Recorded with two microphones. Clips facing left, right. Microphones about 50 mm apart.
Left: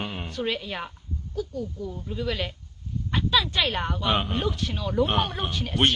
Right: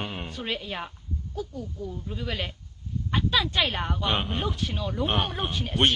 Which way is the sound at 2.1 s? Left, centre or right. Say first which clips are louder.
Left 5 dB; centre.